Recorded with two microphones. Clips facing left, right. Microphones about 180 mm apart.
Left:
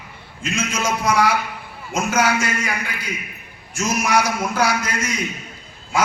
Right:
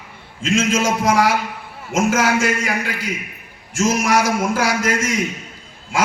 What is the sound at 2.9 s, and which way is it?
A man's voice, 90° right.